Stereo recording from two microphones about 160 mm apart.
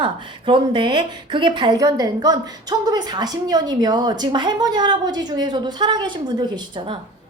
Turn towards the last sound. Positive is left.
turn(degrees=-30)  # may be behind; listen again after turning